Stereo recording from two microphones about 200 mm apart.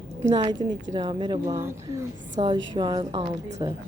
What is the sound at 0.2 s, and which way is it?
A woman's voice, 20° right (ahead or behind).